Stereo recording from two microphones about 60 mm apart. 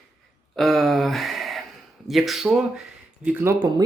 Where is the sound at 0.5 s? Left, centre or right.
Centre.